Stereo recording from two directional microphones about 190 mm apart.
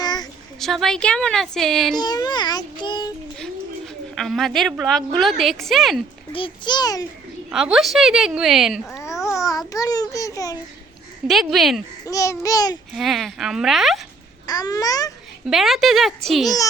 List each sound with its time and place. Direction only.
0.0 s a sound: 20° left (ahead or behind)
0.6 s a woman's voice: centre (ahead or behind)
2.0 s a child's voice: 20° left (ahead or behind)
3.3 s a woman's voice: 5° left (ahead or behind)
6.3 s a child's voice: 25° left (ahead or behind)
7.5 s a woman's voice: centre (ahead or behind)
9.2 s babbling: 15° left (ahead or behind)
11.3 s a woman's voice: centre (ahead or behind)
12.0 s a child's voice: 15° left (ahead or behind)
12.9 s a woman's voice: centre (ahead or behind)
14.4 s a child's voice: 20° left (ahead or behind)
15.4 s a woman's voice: centre (ahead or behind)